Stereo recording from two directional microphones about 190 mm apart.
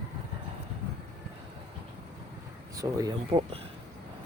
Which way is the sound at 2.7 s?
20° right (ahead or behind).